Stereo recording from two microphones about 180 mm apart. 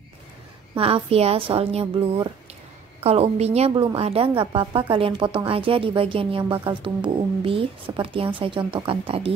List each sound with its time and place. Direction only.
0.7 s a woman's voice: 30° right (ahead or behind)